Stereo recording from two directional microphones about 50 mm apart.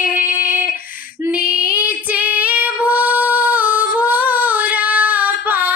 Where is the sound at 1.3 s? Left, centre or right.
Right.